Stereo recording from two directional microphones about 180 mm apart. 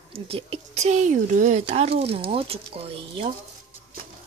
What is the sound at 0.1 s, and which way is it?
A woman's voice, 30° right (ahead or behind).